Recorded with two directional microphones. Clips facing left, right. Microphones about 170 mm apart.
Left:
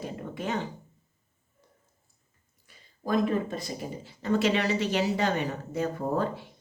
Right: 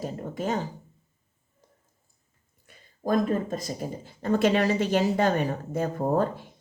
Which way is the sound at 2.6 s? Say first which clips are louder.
Right 4 dB; 45° right (ahead or behind).